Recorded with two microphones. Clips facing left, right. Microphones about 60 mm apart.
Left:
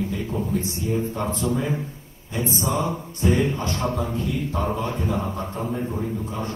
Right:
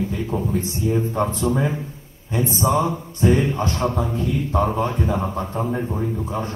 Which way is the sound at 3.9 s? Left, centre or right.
Centre.